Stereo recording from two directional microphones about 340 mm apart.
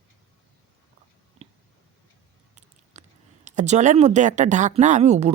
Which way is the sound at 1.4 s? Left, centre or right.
Centre.